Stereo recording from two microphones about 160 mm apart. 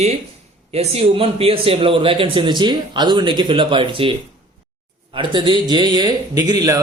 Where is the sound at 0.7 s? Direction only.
40° right (ahead or behind).